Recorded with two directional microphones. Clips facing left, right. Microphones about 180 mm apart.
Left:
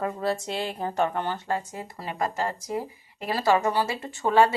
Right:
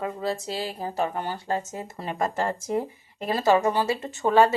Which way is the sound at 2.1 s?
50° right (ahead or behind).